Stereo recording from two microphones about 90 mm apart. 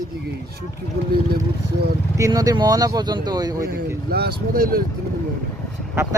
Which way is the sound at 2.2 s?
40° right (ahead or behind).